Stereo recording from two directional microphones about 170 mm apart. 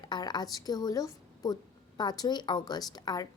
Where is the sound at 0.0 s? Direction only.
25° left (ahead or behind).